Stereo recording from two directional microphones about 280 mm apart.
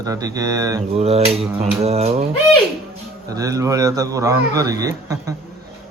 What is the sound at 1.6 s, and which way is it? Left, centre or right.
Mantra, right.